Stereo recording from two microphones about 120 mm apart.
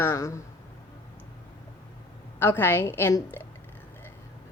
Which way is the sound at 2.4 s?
20° left (ahead or behind).